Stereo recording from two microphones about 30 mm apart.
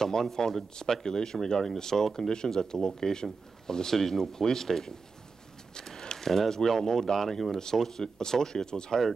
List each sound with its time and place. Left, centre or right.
0.0 s speech: centre
5.8 s a sound: centre
6.6 s speech: centre